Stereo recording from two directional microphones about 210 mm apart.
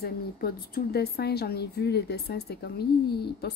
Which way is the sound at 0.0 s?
45° left (ahead or behind).